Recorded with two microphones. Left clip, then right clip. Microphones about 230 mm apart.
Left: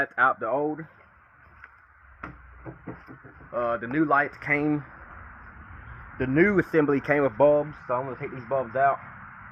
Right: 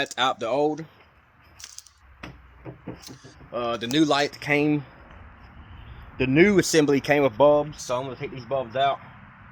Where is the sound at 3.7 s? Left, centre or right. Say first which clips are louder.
Right 2 dB; right.